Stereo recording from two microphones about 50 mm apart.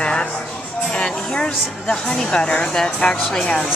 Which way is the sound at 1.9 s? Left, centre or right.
Centre.